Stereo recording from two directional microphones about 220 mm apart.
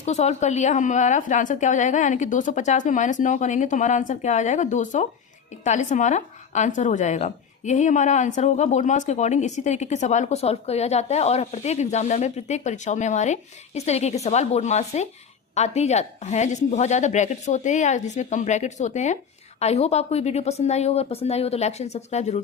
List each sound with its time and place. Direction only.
0.0 s a woman's voice: 30° left (ahead or behind)